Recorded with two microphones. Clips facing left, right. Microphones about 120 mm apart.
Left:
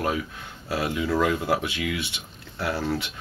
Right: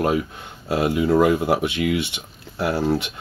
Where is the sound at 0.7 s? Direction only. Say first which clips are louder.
Right 7 dB; 20° right (ahead or behind).